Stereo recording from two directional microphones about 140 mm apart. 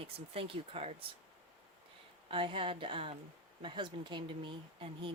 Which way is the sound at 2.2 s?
40° right (ahead or behind).